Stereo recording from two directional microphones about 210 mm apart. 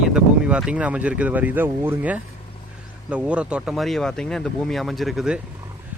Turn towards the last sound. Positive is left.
turn(degrees=-5)  # may be behind; listen again after turning